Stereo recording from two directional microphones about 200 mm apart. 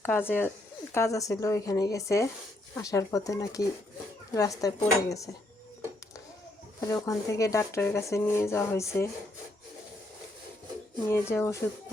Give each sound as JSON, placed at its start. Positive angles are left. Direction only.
{"t": 0.0, "sound": "speech", "side_deg": 10}
{"t": 6.7, "sound": "speech", "side_deg": 15}
{"t": 11.0, "sound": "speech", "side_deg": 15}